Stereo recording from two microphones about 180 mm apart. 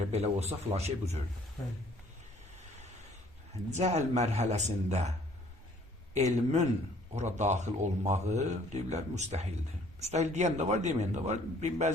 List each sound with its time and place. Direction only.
0.1 s a man's voice: 35° right (ahead or behind)
3.8 s a man's voice: 40° right (ahead or behind)
6.1 s a man's voice: 40° right (ahead or behind)